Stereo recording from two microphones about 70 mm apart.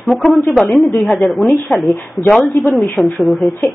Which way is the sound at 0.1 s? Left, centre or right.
Centre.